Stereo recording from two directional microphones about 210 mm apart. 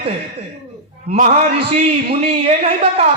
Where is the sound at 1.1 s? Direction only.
30° right (ahead or behind).